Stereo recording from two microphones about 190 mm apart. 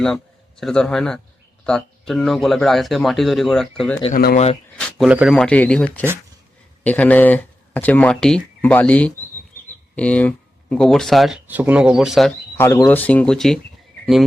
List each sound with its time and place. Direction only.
0.0 s a man's voice: 5° left (ahead or behind)
4.1 s speech: 50° left (ahead or behind)
4.8 s speech: 5° left (ahead or behind)
12.5 s speech: 15° left (ahead or behind)